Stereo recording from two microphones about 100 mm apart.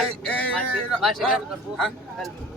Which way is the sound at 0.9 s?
Centre (ahead or behind).